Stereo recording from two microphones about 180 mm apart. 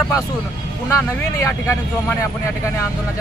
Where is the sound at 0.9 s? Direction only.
15° left (ahead or behind).